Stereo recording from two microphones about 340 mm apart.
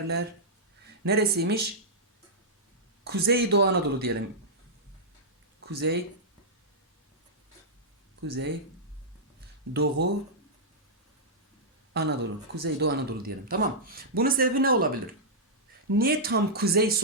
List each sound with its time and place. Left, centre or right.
1.0 s speech: right
3.0 s speech: right
5.5 s speech: right
8.2 s speech: right
10.0 s speech: right
11.9 s speech: right